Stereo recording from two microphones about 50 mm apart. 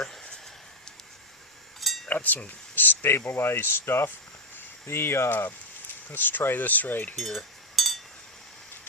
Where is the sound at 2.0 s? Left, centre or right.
Left.